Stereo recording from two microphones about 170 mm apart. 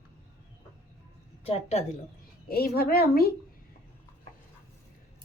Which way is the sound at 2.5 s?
65° left (ahead or behind).